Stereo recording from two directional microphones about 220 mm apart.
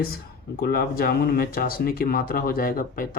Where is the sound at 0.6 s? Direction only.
45° left (ahead or behind).